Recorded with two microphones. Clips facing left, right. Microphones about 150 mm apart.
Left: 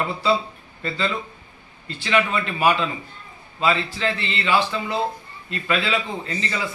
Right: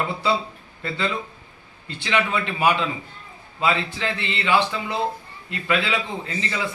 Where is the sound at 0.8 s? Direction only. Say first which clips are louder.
Left 1 dB; 15° right (ahead or behind).